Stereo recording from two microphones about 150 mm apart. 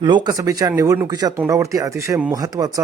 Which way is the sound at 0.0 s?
30° right (ahead or behind).